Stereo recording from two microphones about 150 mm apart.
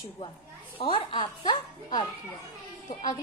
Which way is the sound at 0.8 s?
40° left (ahead or behind).